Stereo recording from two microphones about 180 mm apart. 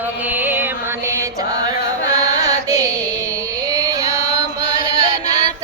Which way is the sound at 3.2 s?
15° right (ahead or behind).